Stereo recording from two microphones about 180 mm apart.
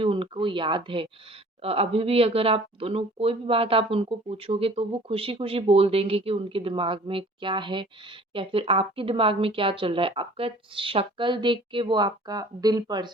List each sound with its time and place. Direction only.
0.0 s a woman's voice: 30° right (ahead or behind)